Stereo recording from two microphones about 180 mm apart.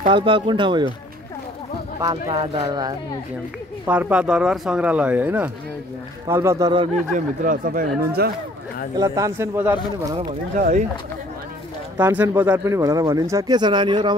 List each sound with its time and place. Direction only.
0.1 s speech: 30° right (ahead or behind)
2.0 s speech: 25° right (ahead or behind)
3.8 s speech: 10° right (ahead or behind)
7.1 s speech: 45° right (ahead or behind)
8.9 s speech: 20° right (ahead or behind)
10.1 s speech: 45° right (ahead or behind)
12.0 s speech: 10° right (ahead or behind); by 14.1 s 25° right (ahead or behind)